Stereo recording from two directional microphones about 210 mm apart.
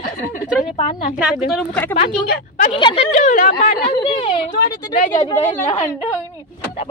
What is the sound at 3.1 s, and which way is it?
Speech, 35° left (ahead or behind).